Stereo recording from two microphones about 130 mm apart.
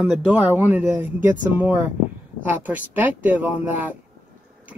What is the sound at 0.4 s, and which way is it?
Speech, 15° right (ahead or behind).